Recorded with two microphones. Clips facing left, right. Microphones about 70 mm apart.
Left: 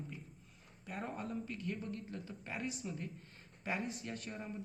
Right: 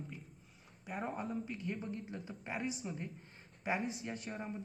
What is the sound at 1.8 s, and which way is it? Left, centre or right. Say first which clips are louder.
Speech: right 1 dB; centre.